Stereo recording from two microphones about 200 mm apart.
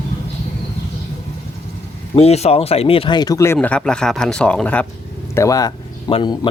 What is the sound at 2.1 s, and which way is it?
Speech, 30° left (ahead or behind).